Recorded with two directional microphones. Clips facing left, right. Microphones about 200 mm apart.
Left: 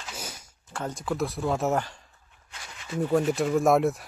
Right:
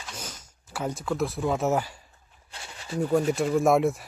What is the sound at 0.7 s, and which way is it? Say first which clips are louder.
Speech: right 1 dB; 5° right (ahead or behind).